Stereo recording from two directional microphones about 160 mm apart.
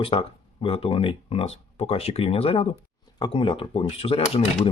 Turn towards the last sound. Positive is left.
turn(degrees=35)  # may be behind; listen again after turning